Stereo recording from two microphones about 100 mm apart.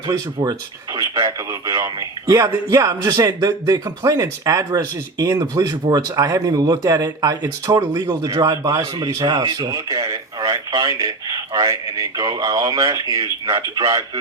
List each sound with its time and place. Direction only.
0.1 s speech: 45° right (ahead or behind)
0.9 s a man's voice: 30° right (ahead or behind); by 9.7 s 50° right (ahead or behind)
9.7 s radio: 35° right (ahead or behind)
10.8 s a man's voice: 35° right (ahead or behind)